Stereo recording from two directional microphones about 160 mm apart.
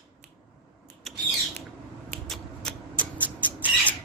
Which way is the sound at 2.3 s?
5° left (ahead or behind).